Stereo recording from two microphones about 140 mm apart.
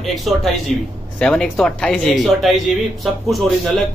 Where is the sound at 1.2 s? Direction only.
5° left (ahead or behind).